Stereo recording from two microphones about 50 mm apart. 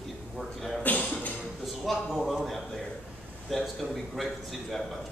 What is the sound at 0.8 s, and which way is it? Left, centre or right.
Speech, left.